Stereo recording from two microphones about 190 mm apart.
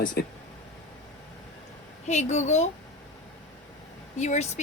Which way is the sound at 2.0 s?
35° left (ahead or behind).